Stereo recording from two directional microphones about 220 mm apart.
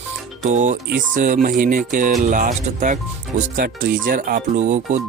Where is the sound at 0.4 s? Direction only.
35° right (ahead or behind).